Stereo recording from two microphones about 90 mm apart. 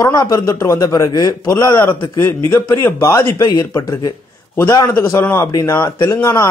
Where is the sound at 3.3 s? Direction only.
45° left (ahead or behind).